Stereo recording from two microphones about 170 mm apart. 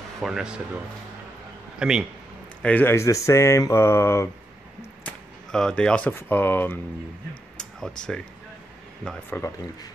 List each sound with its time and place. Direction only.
0.2 s speech: 5° right (ahead or behind)
1.8 s speech: 5° right (ahead or behind)
2.6 s speech: 10° left (ahead or behind)
5.0 s speech: 5° left (ahead or behind)
7.5 s a sound: 5° left (ahead or behind)
9.3 s speech: 10° left (ahead or behind)